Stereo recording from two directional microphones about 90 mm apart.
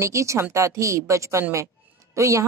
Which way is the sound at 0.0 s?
35° right (ahead or behind).